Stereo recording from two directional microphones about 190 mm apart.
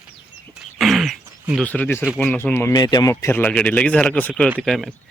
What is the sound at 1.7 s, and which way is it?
A man's voice, 10° left (ahead or behind).